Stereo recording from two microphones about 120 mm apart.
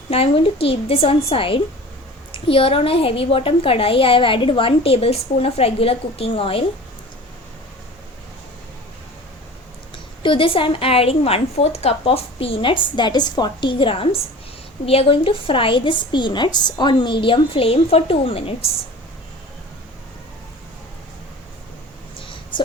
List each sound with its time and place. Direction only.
0.1 s a woman's voice: 55° left (ahead or behind)
9.9 s a woman's voice: 45° left (ahead or behind)
22.5 s a sound: 40° left (ahead or behind)